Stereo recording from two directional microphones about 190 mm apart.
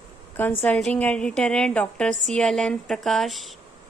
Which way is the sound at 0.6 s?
5° left (ahead or behind).